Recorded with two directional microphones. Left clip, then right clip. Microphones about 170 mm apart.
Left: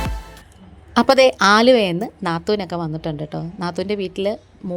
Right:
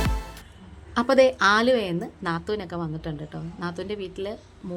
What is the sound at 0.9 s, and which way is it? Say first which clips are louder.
Speech: left 6 dB; 40° left (ahead or behind).